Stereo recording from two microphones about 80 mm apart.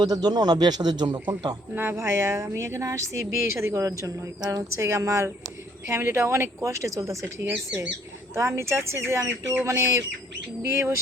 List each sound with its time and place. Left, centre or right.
0.0 s speech: right
1.7 s speech: right
9.6 s speech: right